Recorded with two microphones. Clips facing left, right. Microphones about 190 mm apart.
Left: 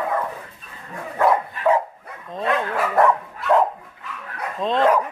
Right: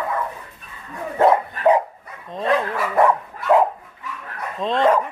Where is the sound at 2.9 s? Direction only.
Centre (ahead or behind).